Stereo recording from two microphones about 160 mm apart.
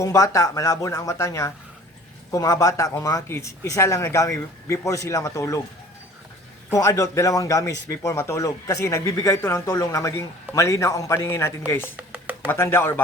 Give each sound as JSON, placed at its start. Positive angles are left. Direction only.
{"t": 0.0, "sound": "speech", "side_deg": 20}
{"t": 6.7, "sound": "speech", "side_deg": 20}
{"t": 11.9, "sound": "a sound", "side_deg": -10}
{"t": 12.5, "sound": "speech", "side_deg": 15}